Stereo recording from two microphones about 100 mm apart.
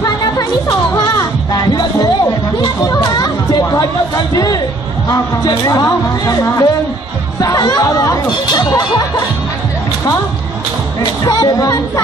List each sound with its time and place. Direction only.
0.0 s music: 40° left (ahead or behind)
5.7 s speech: 35° left (ahead or behind)
11.2 s speech: 40° left (ahead or behind)